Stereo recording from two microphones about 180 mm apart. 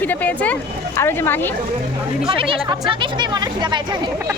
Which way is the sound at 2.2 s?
30° right (ahead or behind).